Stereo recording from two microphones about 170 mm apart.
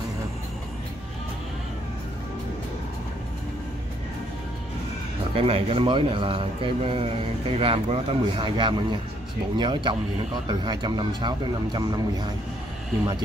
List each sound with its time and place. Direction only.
5.3 s speech: 35° right (ahead or behind)